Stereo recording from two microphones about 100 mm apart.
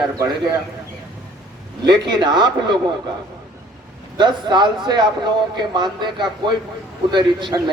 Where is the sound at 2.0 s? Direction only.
45° right (ahead or behind).